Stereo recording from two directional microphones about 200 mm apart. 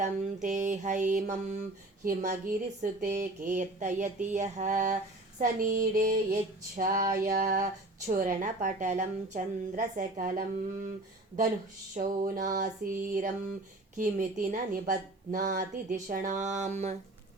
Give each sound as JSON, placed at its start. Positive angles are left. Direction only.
{"t": 0.4, "sound": "female singing", "side_deg": -40}
{"t": 11.9, "sound": "female singing", "side_deg": -45}